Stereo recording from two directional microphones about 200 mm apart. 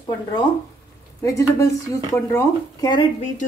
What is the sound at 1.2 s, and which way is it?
Speech, 15° left (ahead or behind).